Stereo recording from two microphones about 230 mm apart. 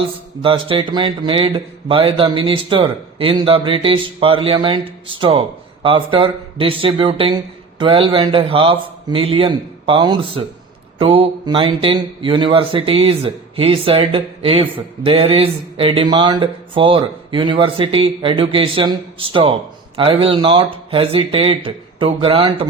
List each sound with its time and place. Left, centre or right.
0.4 s speech: right